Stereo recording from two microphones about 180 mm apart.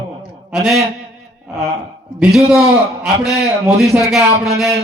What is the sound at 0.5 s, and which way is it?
Speech, centre (ahead or behind).